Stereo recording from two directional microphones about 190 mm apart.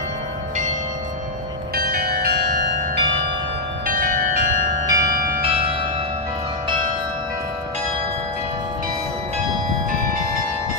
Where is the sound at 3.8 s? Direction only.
45° right (ahead or behind).